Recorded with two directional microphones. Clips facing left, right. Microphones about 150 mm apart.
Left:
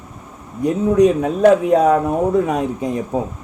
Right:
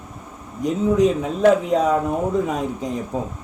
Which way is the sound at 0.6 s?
65° left (ahead or behind).